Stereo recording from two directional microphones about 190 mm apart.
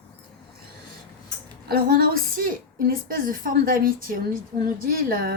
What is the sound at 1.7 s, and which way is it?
A woman's voice, 50° right (ahead or behind).